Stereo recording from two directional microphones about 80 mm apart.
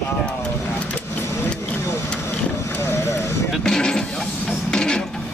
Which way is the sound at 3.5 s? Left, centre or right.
Centre.